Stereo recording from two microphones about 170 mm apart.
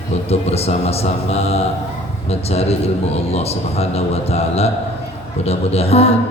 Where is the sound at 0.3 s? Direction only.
35° left (ahead or behind).